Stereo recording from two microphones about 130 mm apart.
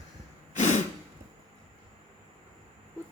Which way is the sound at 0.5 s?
60° left (ahead or behind).